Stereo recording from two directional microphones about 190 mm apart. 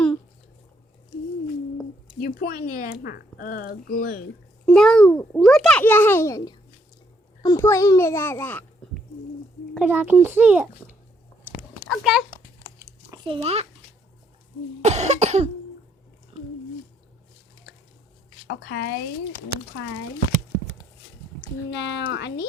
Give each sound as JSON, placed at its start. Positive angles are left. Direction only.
{"t": 2.2, "sound": "speech", "side_deg": 50}
{"t": 4.6, "sound": "a child's voice", "side_deg": 5}
{"t": 9.7, "sound": "a child's voice", "side_deg": -10}
{"t": 12.8, "sound": "chewing", "side_deg": -20}
{"t": 14.8, "sound": "cough", "side_deg": -35}
{"t": 18.4, "sound": "speech", "side_deg": 65}
{"t": 21.7, "sound": "speech", "side_deg": 65}